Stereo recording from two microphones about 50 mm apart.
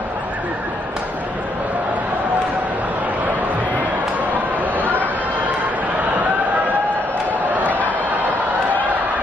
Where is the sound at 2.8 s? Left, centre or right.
Right.